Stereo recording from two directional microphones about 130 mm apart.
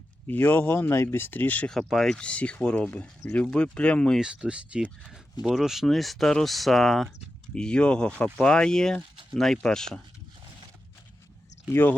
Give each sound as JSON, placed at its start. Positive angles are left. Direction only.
{"t": 0.3, "sound": "speech", "side_deg": 15}
{"t": 4.2, "sound": "speech", "side_deg": -5}
{"t": 11.7, "sound": "speech", "side_deg": 15}